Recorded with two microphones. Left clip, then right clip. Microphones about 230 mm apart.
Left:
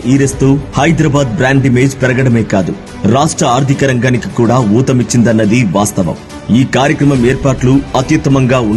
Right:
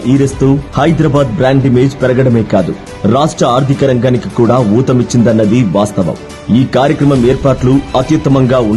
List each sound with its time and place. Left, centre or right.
0.1 s speech: centre